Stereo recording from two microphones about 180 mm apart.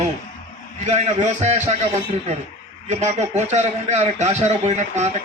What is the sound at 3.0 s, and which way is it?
A man's voice, 40° right (ahead or behind).